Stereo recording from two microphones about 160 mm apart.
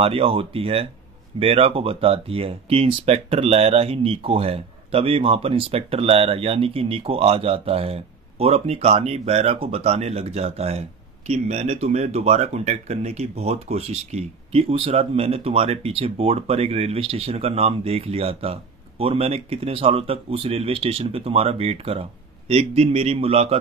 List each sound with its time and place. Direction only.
0.0 s speech: 35° right (ahead or behind)